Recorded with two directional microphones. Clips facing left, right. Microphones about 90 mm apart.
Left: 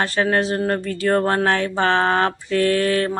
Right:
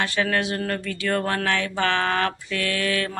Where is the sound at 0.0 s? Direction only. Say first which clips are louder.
Left 4 dB; 35° left (ahead or behind).